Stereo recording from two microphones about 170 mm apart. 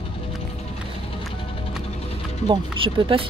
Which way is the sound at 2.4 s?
30° right (ahead or behind).